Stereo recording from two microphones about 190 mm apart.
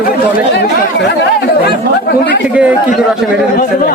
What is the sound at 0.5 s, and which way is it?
Chatter, 60° left (ahead or behind).